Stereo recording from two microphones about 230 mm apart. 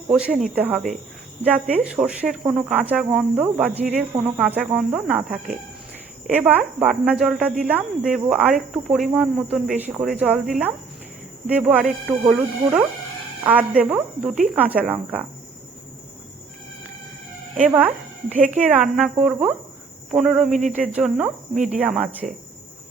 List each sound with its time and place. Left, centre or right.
0.3 s speech: right
0.5 s speech: centre
17.7 s speech: centre
18.3 s speech: right
18.7 s speech: centre
20.5 s speech: right
20.8 s speech: centre
21.5 s speech: right
21.8 s speech: centre